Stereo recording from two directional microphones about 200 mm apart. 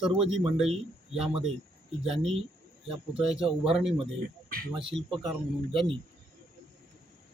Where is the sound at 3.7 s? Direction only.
Centre (ahead or behind).